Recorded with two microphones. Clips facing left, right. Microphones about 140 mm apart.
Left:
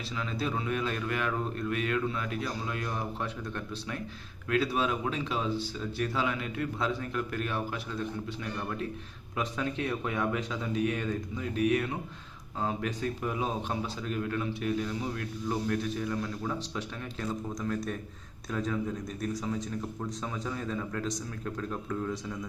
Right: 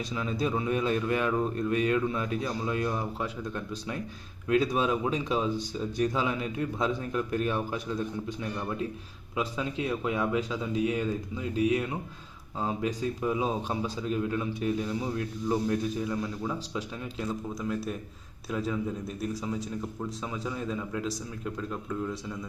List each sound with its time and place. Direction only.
0.2 s speech: 20° right (ahead or behind)
3.2 s a man's voice: 15° right (ahead or behind)
9.3 s a man's voice: 15° right (ahead or behind)